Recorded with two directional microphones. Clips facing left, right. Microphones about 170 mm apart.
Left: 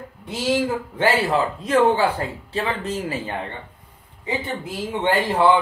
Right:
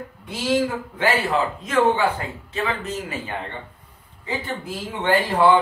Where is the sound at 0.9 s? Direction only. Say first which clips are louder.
Left 2 dB; 35° left (ahead or behind).